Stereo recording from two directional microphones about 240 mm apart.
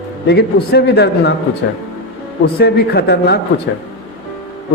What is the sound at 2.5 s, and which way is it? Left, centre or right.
Speech, left.